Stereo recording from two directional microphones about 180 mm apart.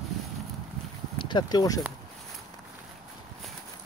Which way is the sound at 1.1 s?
25° left (ahead or behind).